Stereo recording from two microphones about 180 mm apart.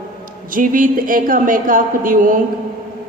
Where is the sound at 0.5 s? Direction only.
50° right (ahead or behind).